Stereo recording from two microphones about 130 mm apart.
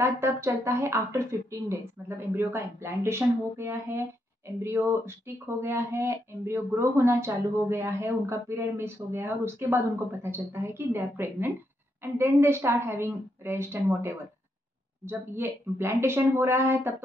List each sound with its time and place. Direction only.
0.0 s a woman's voice: 20° right (ahead or behind)